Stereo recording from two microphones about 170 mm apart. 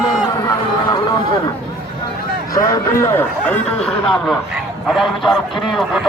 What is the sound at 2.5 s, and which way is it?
A man's voice, 20° left (ahead or behind).